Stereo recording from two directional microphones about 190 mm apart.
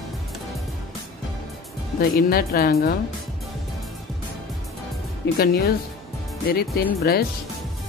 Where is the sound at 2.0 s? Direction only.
50° left (ahead or behind).